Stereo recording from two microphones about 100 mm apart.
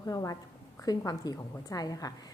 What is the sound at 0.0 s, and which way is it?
A woman's voice, 35° left (ahead or behind).